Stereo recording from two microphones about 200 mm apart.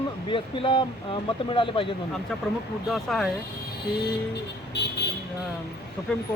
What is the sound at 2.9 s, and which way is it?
Speech, centre (ahead or behind).